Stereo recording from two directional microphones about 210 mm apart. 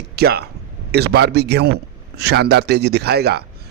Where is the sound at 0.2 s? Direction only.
50° right (ahead or behind).